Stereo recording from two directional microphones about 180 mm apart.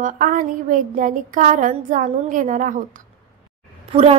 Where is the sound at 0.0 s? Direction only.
45° right (ahead or behind).